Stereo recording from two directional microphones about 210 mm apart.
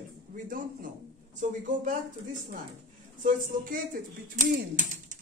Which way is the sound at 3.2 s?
40° right (ahead or behind).